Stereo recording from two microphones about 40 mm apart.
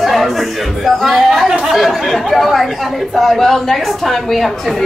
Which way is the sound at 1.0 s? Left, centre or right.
Centre.